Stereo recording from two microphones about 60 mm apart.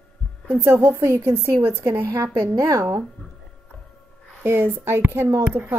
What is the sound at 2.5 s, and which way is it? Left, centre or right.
Speech, right.